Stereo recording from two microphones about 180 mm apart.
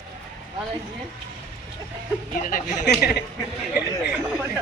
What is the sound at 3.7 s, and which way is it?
Speech, 10° right (ahead or behind).